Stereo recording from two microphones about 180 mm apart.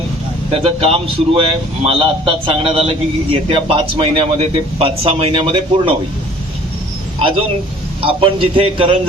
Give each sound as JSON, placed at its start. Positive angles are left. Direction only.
{"t": 0.5, "sound": "speech", "side_deg": -30}
{"t": 7.2, "sound": "speech", "side_deg": -30}